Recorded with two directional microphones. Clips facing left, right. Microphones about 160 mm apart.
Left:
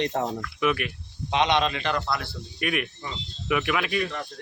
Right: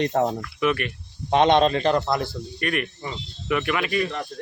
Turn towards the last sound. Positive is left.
turn(degrees=0)  # may be behind; listen again after turning